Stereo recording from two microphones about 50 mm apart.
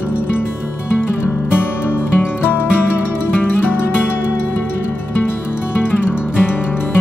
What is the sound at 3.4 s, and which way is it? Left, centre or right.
Music, left.